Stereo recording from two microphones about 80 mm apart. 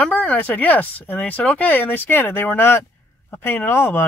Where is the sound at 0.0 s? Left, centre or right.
Centre.